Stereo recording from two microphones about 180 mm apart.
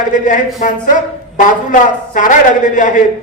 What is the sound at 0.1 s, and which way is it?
A man's voice, 45° left (ahead or behind).